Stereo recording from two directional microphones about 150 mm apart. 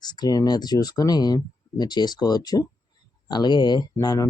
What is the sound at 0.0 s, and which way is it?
Speech, 25° left (ahead or behind).